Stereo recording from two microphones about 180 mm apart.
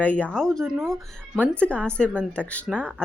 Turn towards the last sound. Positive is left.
turn(degrees=5)  # may be behind; listen again after turning